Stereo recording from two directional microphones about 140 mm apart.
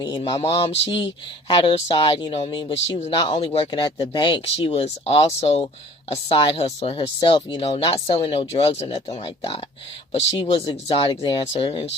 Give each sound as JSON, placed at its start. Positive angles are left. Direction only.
{"t": 0.0, "sound": "speech", "side_deg": 35}
{"t": 3.7, "sound": "speech", "side_deg": 30}
{"t": 7.2, "sound": "speech", "side_deg": 35}
{"t": 7.6, "sound": "speech", "side_deg": 45}